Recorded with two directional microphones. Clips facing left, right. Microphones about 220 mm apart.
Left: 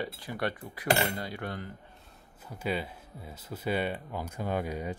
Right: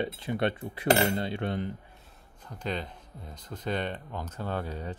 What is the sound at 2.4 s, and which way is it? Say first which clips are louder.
Speech: left 1 dB; 10° left (ahead or behind).